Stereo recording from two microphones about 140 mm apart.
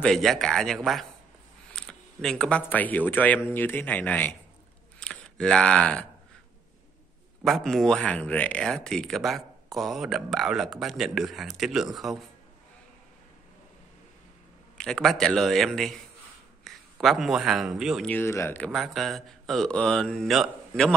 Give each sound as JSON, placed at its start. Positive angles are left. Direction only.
{"t": 0.0, "sound": "speech", "side_deg": 0}
{"t": 7.4, "sound": "speech", "side_deg": 0}
{"t": 14.8, "sound": "a man's voice", "side_deg": 5}
{"t": 18.0, "sound": "speech", "side_deg": 15}
{"t": 18.7, "sound": "speech", "side_deg": 0}